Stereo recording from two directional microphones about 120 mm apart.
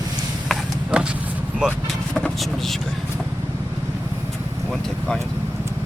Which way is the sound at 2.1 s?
5° left (ahead or behind).